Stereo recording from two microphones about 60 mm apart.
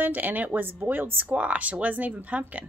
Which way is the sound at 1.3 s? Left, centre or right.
Right.